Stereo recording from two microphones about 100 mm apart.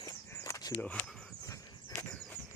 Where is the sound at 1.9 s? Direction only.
20° left (ahead or behind).